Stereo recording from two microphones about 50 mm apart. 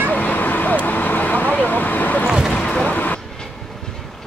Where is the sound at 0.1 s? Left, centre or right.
Left.